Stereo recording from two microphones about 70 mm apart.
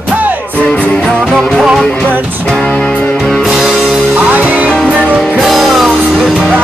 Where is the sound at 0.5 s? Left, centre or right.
Centre.